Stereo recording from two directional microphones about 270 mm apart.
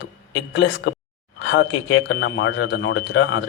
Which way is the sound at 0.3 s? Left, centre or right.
Left.